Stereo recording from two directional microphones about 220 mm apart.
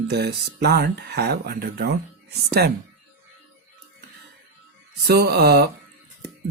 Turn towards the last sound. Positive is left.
turn(degrees=-45)  # may be behind; listen again after turning